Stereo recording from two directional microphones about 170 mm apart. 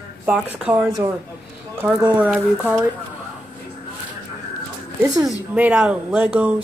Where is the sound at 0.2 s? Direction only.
10° right (ahead or behind).